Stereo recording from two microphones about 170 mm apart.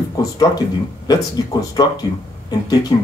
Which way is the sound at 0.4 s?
20° left (ahead or behind).